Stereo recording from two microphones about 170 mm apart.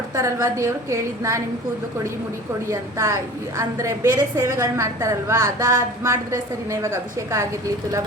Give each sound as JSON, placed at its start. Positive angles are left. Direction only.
{"t": 0.2, "sound": "a woman's voice", "side_deg": -15}
{"t": 2.6, "sound": "a woman's voice", "side_deg": -15}